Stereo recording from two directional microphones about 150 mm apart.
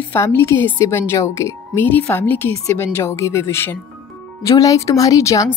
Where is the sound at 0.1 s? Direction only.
15° left (ahead or behind).